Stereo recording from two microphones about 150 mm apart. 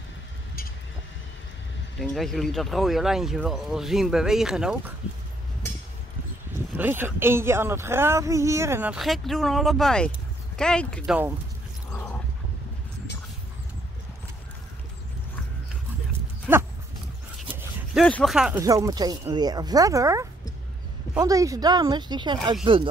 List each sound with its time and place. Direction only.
2.0 s speech: centre (ahead or behind)
6.8 s speech: 15° right (ahead or behind)
8.9 s speech: centre (ahead or behind)
16.5 s dog: 10° right (ahead or behind)
17.9 s speech: 5° left (ahead or behind)
18.6 s speech: 20° right (ahead or behind)